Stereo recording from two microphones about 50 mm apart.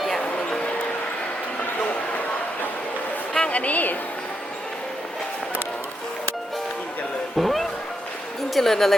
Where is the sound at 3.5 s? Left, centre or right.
Left.